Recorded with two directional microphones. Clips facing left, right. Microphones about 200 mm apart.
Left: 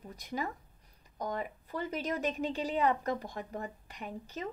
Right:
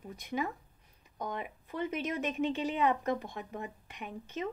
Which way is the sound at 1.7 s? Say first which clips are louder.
Right 1 dB; 35° left (ahead or behind).